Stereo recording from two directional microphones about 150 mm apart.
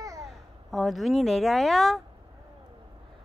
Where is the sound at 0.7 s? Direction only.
Centre (ahead or behind).